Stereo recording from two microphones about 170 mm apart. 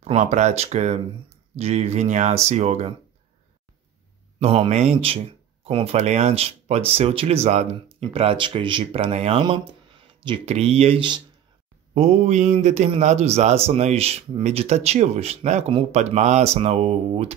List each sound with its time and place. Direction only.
0.0 s a man's voice: 40° right (ahead or behind)
4.4 s a man's voice: 35° right (ahead or behind)
11.9 s a man's voice: 40° right (ahead or behind)